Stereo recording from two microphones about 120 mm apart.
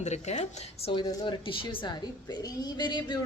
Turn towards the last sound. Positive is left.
turn(degrees=35)  # may be behind; listen again after turning